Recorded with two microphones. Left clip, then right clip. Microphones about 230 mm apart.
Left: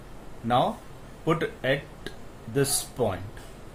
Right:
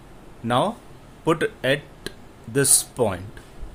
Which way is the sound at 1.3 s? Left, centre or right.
Right.